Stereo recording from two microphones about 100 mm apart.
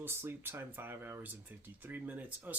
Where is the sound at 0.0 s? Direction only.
25° right (ahead or behind).